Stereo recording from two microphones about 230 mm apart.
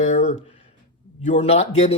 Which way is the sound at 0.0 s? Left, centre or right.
Left.